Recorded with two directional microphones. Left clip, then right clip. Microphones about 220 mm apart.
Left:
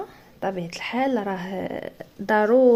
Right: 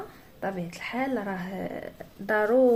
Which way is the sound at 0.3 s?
40° left (ahead or behind).